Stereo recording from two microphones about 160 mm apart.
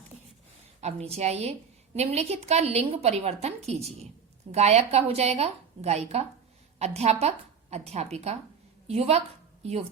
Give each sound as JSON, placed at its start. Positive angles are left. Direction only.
{"t": 0.8, "sound": "a woman's voice", "side_deg": -40}